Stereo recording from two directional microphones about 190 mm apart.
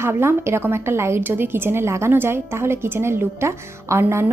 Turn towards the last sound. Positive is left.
turn(degrees=-15)  # may be behind; listen again after turning